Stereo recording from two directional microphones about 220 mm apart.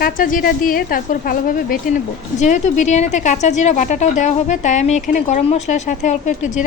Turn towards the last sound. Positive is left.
turn(degrees=35)  # may be behind; listen again after turning